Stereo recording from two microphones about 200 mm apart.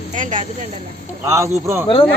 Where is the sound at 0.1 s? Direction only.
40° right (ahead or behind).